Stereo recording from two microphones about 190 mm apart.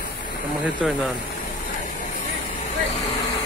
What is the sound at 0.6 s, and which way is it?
Speech, 5° right (ahead or behind).